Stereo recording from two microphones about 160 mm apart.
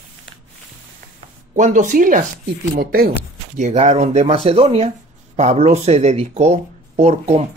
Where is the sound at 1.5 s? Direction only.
50° right (ahead or behind).